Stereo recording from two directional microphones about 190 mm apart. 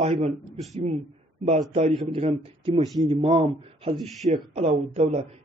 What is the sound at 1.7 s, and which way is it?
Speech, 30° right (ahead or behind).